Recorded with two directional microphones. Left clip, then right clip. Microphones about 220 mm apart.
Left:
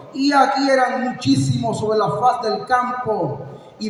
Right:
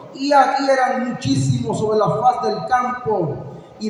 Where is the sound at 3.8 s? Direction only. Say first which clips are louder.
Right 1 dB; 40° left (ahead or behind).